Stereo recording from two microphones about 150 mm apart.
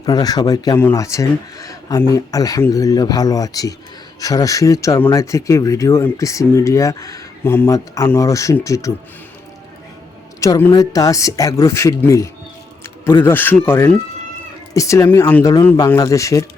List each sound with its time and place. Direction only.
0.0 s speech: 25° left (ahead or behind)
10.4 s speech: 20° left (ahead or behind)